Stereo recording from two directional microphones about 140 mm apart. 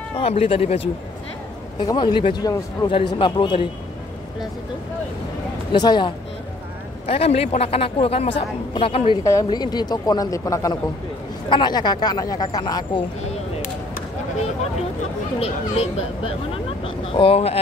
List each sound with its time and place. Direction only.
0.2 s a woman's voice: 45° left (ahead or behind)
1.8 s speech: 30° left (ahead or behind)
5.7 s speech: 30° left (ahead or behind)
7.1 s a woman's voice: 45° left (ahead or behind)
9.2 s speech: 25° left (ahead or behind)
15.3 s a woman's voice: 45° left (ahead or behind)